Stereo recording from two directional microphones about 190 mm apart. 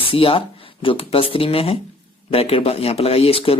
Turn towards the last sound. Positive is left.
turn(degrees=30)  # may be behind; listen again after turning